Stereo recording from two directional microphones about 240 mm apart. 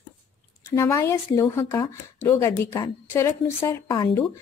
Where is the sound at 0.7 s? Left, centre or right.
Centre.